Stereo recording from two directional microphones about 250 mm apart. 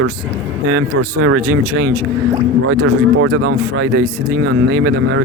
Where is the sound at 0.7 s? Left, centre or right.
Right.